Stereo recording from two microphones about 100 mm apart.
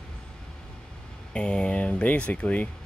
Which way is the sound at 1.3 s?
10° left (ahead or behind).